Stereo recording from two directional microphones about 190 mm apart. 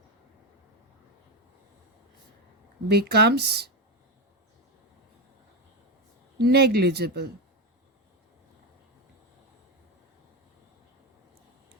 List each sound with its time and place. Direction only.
2.9 s speech: 60° right (ahead or behind)
6.4 s speech: 55° right (ahead or behind)